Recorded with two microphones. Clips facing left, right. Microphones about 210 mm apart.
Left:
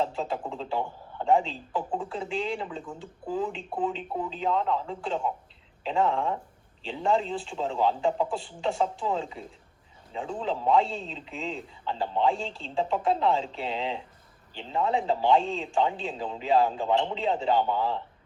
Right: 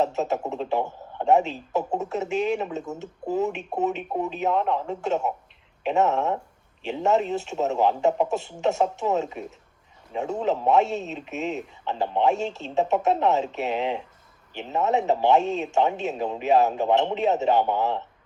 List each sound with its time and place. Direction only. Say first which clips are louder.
0.0 s a man's voice: right 5 dB; 25° right (ahead or behind)